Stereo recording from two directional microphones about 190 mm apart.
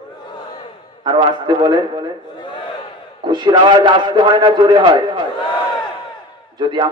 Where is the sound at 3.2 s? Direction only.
25° right (ahead or behind).